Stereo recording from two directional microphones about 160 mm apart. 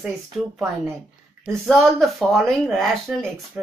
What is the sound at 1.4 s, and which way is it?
Speech, centre (ahead or behind).